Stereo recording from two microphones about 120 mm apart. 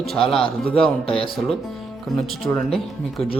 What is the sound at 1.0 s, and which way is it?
Speech, 50° left (ahead or behind).